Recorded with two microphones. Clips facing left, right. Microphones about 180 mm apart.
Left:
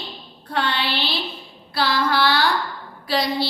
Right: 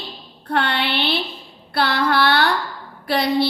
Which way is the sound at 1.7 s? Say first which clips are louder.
Right 2 dB; 60° right (ahead or behind).